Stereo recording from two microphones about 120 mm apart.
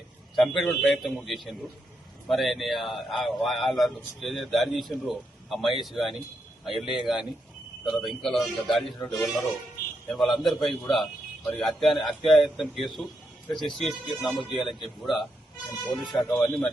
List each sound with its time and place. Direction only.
0.3 s a man's voice: centre (ahead or behind)
16.4 s a man's voice: 15° left (ahead or behind)